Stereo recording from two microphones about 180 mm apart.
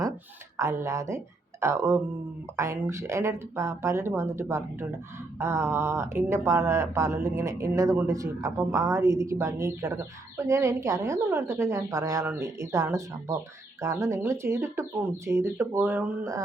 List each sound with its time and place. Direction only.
0.5 s speech: 15° right (ahead or behind)